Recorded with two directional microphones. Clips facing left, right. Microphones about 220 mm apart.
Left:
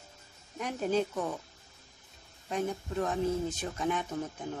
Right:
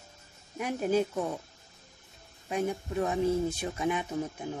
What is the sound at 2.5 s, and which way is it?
Speech, 10° right (ahead or behind).